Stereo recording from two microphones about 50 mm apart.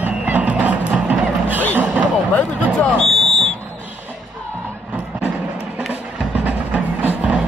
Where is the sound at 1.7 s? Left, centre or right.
Right.